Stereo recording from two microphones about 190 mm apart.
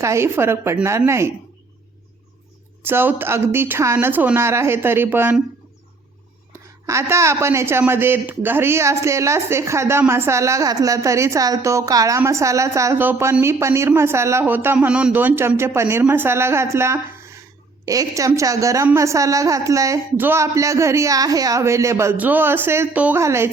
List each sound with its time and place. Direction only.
0.0 s speech: 15° right (ahead or behind)
2.8 s speech: 10° right (ahead or behind)
6.8 s speech: 15° right (ahead or behind)